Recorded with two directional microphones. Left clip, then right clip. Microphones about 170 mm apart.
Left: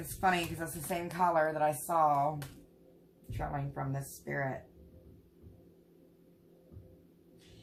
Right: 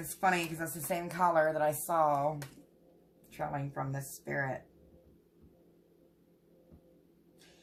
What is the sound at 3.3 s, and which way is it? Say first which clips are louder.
Speech: right 1 dB; 35° right (ahead or behind).